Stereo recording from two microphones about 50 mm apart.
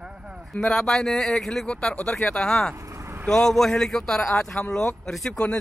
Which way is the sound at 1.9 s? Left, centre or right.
Left.